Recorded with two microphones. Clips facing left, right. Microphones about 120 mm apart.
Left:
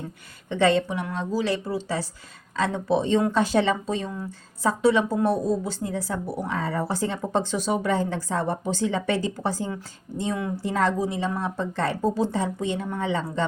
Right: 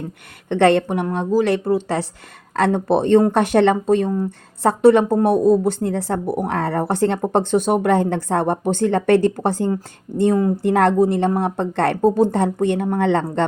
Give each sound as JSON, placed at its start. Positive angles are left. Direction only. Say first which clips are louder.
{"t": 0.4, "sound": "speech", "louder": "right 6 dB", "side_deg": -65}